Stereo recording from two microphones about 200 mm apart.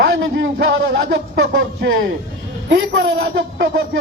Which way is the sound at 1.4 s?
60° right (ahead or behind).